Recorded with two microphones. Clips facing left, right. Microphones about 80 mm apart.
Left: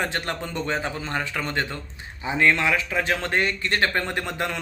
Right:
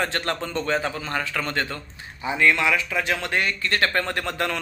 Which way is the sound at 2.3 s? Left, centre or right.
Left.